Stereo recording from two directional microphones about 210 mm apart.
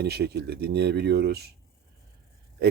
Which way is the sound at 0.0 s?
50° right (ahead or behind).